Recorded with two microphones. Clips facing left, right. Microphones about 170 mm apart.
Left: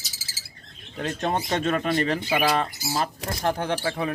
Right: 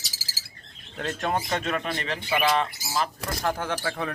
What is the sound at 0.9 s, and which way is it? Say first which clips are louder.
Speech: left 1 dB; 20° left (ahead or behind).